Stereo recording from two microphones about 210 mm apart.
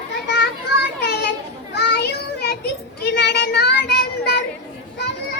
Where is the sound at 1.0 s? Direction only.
50° left (ahead or behind).